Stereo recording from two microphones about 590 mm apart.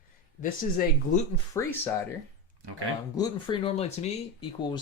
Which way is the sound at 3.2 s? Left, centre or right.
Centre.